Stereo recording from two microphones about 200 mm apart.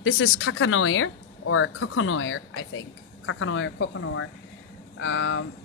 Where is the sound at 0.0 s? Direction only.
85° left.